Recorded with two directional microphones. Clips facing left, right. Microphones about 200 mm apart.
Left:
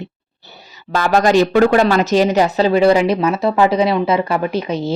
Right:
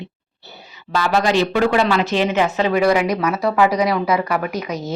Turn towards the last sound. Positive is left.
turn(degrees=30)  # may be behind; listen again after turning